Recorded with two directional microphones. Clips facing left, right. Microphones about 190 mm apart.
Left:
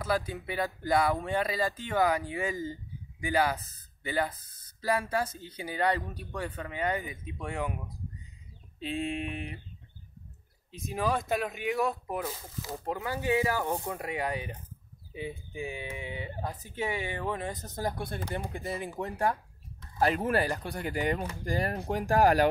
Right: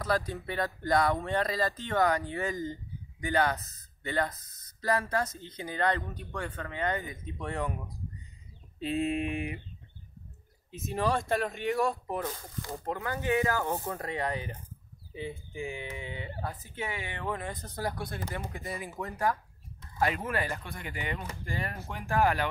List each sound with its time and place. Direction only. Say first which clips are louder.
0.3 s speech: even; 10° left (ahead or behind)
4.4 s speech: right 2 dB; 30° left (ahead or behind)
4.8 s speech: even; 10° left (ahead or behind)
8.7 s speech: right 3 dB; 5° right (ahead or behind)
10.7 s speech: right 1 dB; centre (ahead or behind); by 18.4 s 30° left (ahead or behind)
18.7 s speech: left 4 dB; 5° right (ahead or behind)
18.9 s speech: even; 30° left (ahead or behind)